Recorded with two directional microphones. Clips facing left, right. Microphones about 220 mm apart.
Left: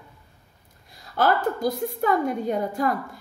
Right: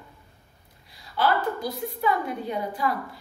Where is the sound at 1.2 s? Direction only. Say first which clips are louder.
Left 3 dB; 45° left (ahead or behind).